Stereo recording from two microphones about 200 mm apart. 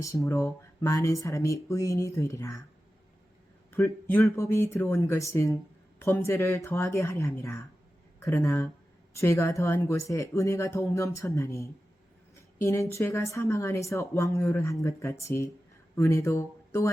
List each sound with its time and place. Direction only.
0.3 s a woman's voice: 15° left (ahead or behind)
3.7 s a woman's voice: 10° left (ahead or behind)